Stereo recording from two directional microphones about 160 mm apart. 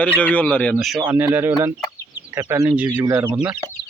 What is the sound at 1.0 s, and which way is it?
Speech, 10° right (ahead or behind).